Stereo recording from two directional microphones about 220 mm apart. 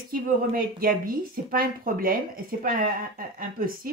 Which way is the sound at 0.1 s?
40° right (ahead or behind).